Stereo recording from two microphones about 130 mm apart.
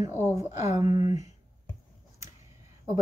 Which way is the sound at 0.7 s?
35° right (ahead or behind).